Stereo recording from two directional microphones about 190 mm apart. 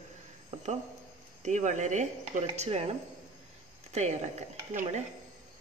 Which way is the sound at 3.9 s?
35° right (ahead or behind).